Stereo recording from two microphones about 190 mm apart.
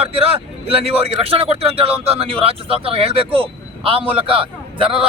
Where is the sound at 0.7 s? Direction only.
30° right (ahead or behind).